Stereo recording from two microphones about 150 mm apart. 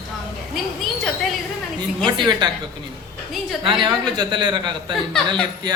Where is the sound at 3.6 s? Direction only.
35° right (ahead or behind).